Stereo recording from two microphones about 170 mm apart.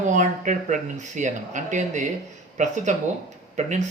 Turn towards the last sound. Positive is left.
turn(degrees=-45)  # may be behind; listen again after turning